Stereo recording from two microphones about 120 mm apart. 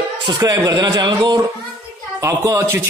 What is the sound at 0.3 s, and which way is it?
A man's voice, 30° right (ahead or behind).